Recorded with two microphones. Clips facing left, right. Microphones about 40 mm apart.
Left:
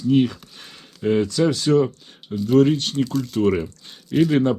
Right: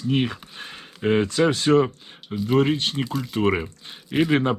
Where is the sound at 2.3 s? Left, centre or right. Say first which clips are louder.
Left 3 dB; centre.